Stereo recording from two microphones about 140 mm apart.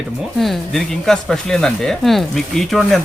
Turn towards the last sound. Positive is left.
turn(degrees=0)  # may be behind; listen again after turning